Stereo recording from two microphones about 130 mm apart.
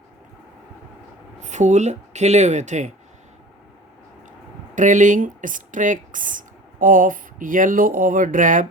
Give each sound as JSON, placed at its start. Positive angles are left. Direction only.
{"t": 1.4, "sound": "speech", "side_deg": -65}
{"t": 4.7, "sound": "speech", "side_deg": -75}